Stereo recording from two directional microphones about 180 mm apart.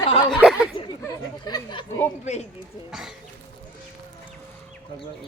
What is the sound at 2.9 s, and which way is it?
Speech, centre (ahead or behind).